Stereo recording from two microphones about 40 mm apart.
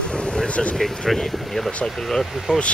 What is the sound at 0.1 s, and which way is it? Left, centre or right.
Vehicle, centre.